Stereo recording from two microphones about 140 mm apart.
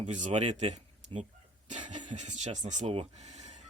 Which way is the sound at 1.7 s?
60° right (ahead or behind).